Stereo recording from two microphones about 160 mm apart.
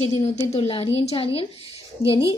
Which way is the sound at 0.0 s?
45° left (ahead or behind).